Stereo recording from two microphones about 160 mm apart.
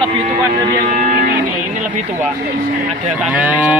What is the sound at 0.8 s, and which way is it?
Speech, 50° right (ahead or behind).